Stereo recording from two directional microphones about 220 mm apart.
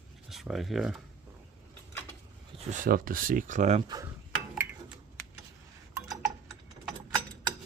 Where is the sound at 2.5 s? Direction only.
35° right (ahead or behind).